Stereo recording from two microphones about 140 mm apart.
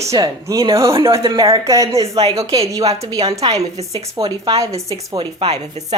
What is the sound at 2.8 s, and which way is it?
Speech, 45° right (ahead or behind).